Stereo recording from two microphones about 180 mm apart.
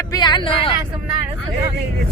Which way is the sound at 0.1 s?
25° left (ahead or behind).